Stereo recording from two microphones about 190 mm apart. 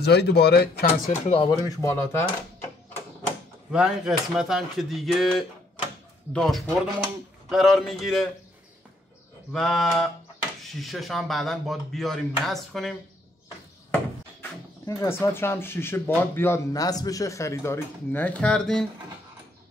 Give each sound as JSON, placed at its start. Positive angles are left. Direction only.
{"t": 0.0, "sound": "speech", "side_deg": 60}
{"t": 1.2, "sound": "speech", "side_deg": 30}
{"t": 1.5, "sound": "speech", "side_deg": 15}
{"t": 3.7, "sound": "speech", "side_deg": -5}
{"t": 9.5, "sound": "speech", "side_deg": 0}
{"t": 14.9, "sound": "speech", "side_deg": 15}